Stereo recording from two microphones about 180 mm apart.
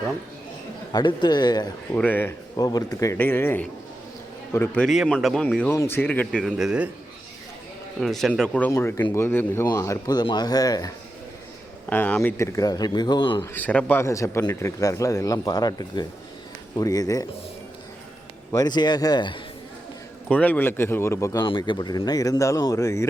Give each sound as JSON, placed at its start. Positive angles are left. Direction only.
{"t": 0.9, "sound": "speech", "side_deg": 25}
{"t": 2.0, "sound": "speech", "side_deg": 10}
{"t": 2.6, "sound": "speech", "side_deg": 20}
{"t": 8.0, "sound": "speech", "side_deg": 0}
{"t": 11.9, "sound": "speech", "side_deg": 10}
{"t": 13.4, "sound": "speech", "side_deg": 10}
{"t": 18.5, "sound": "speech", "side_deg": 20}
{"t": 20.2, "sound": "speech", "side_deg": 10}
{"t": 21.4, "sound": "speech", "side_deg": 25}